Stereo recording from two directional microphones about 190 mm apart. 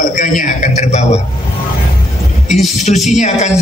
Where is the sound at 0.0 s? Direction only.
45° left (ahead or behind).